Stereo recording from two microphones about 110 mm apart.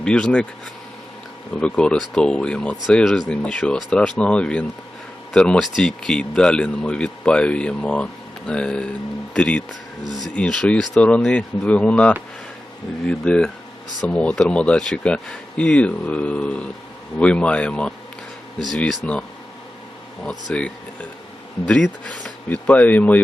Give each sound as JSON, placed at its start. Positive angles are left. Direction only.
{"t": 0.0, "sound": "speech", "side_deg": 10}
{"t": 1.6, "sound": "speech", "side_deg": 10}
{"t": 10.0, "sound": "speech", "side_deg": -40}
{"t": 10.3, "sound": "speech", "side_deg": 10}
{"t": 20.2, "sound": "speech", "side_deg": 10}